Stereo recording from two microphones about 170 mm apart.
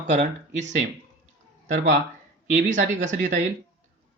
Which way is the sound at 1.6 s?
45° right (ahead or behind).